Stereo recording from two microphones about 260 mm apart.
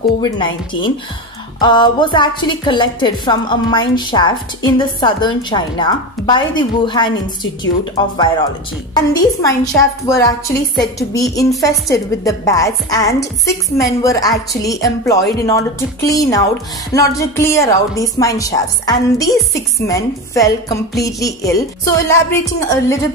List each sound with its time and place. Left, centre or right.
1.6 s a woman's voice: centre